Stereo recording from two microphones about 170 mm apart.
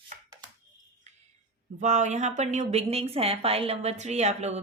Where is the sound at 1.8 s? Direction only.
45° right (ahead or behind).